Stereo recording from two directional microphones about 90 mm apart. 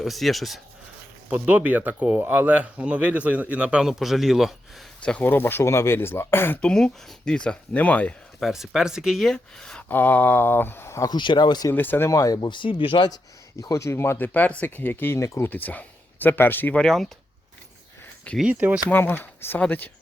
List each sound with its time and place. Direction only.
0.0 s speech: centre (ahead or behind)
1.3 s speech: 15° right (ahead or behind)
5.2 s speech: 25° left (ahead or behind)
6.6 s speech: 10° left (ahead or behind)
8.4 s speech: 5° right (ahead or behind)
9.9 s speech: 20° left (ahead or behind)
11.1 s speech: 55° left (ahead or behind)
11.7 s speech: 20° left (ahead or behind)
12.0 s speech: 40° left (ahead or behind)
12.5 s speech: 65° left (ahead or behind)
13.6 s speech: 40° left (ahead or behind); by 16.7 s 25° left (ahead or behind)
16.7 s speech: 5° left (ahead or behind)
18.4 s speech: 15° right (ahead or behind)
18.9 s speech: 20° left (ahead or behind)